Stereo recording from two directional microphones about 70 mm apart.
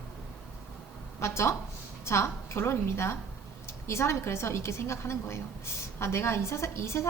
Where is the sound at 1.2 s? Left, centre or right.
Left.